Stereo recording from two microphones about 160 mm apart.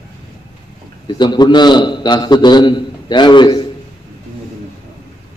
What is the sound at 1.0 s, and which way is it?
A man's voice, 30° left (ahead or behind).